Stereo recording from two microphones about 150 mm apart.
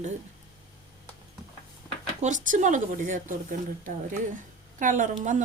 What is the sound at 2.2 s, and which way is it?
A woman's voice, 55° right (ahead or behind).